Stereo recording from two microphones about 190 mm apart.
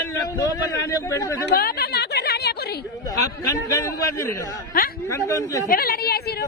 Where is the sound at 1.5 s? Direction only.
55° left (ahead or behind).